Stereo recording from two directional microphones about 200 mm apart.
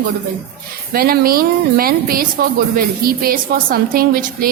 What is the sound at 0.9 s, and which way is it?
A woman's voice, 50° right (ahead or behind).